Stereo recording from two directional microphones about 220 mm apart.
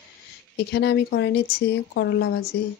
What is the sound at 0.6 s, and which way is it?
Speech, 50° left (ahead or behind).